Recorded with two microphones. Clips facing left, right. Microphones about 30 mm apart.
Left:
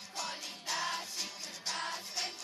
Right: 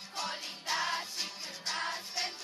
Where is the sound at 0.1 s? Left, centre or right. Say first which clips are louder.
Right 3 dB; right.